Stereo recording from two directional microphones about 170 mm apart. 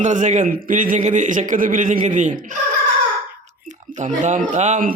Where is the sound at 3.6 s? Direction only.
45° right (ahead or behind).